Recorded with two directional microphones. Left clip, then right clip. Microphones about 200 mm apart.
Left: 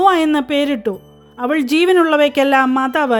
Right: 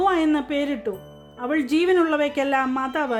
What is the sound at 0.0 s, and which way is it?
Speech, 45° left (ahead or behind).